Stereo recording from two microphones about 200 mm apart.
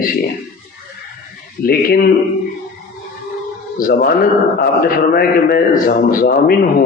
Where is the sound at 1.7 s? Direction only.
45° left (ahead or behind).